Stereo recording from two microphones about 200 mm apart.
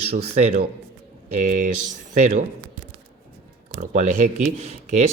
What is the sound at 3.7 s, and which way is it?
A man's voice, 35° right (ahead or behind).